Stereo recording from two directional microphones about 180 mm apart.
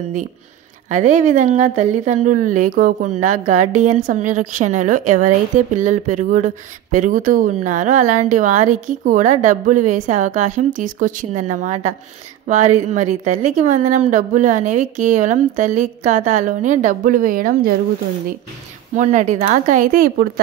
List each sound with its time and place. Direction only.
0.8 s speech: 45° right (ahead or behind)
18.9 s speech: 45° right (ahead or behind)